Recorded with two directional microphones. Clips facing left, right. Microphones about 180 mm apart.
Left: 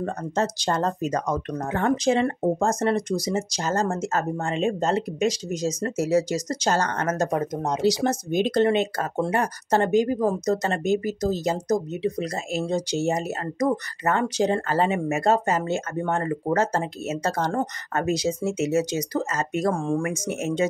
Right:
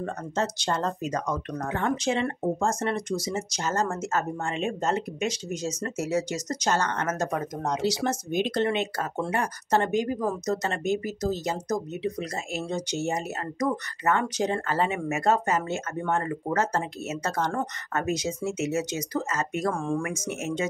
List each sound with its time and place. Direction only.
0.0 s speech: 40° left (ahead or behind)